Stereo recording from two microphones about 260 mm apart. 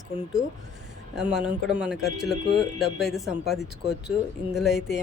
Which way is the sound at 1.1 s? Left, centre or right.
Centre.